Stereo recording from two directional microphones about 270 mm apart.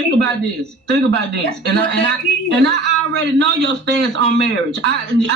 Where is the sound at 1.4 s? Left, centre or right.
Right.